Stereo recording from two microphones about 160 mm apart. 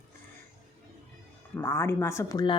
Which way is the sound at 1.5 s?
15° left (ahead or behind).